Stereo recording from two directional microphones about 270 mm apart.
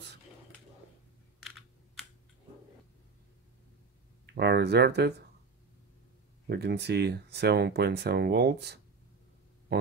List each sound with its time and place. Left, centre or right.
4.4 s speech: right
6.4 s speech: right
9.7 s a sound: right